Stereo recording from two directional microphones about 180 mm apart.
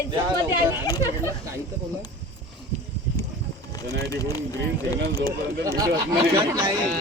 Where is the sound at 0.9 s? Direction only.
20° left (ahead or behind).